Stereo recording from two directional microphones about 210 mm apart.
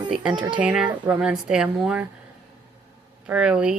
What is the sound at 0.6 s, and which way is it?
Speech, 5° right (ahead or behind).